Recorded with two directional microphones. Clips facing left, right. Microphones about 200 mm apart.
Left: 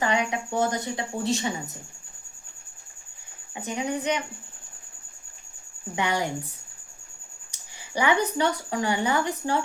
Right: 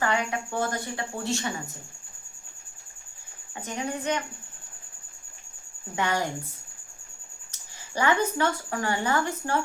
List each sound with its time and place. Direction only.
0.0 s a woman's voice: 15° left (ahead or behind)
3.5 s a woman's voice: 15° left (ahead or behind)
6.0 s a woman's voice: 15° left (ahead or behind)
7.5 s speech: 15° left (ahead or behind)